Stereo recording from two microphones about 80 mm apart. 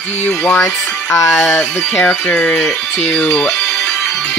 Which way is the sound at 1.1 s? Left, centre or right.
Left.